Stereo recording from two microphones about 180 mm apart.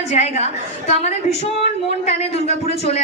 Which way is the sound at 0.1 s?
35° left (ahead or behind).